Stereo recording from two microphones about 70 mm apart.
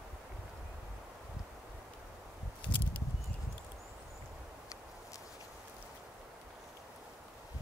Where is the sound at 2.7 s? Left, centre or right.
Left.